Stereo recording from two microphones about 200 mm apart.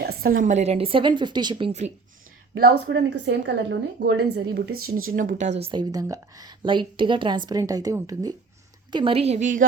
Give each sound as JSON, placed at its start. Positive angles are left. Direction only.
{"t": 0.0, "sound": "a woman's voice", "side_deg": -50}
{"t": 2.6, "sound": "a woman's voice", "side_deg": -55}
{"t": 5.1, "sound": "a woman's voice", "side_deg": -40}